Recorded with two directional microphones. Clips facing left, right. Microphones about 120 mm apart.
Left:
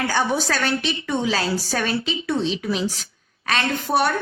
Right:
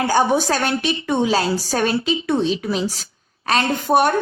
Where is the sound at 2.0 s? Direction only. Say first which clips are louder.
Right 4 dB; 20° right (ahead or behind).